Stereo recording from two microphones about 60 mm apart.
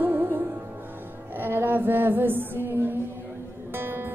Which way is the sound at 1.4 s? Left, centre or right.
Right.